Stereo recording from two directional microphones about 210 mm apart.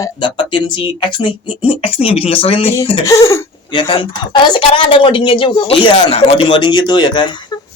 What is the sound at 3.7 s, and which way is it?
Speech, 25° left (ahead or behind).